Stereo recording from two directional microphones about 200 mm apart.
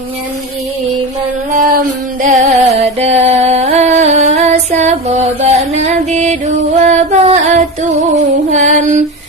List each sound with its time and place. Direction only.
2.2 s music: 35° right (ahead or behind)